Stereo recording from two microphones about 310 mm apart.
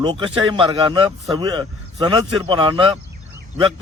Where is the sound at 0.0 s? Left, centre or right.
Centre.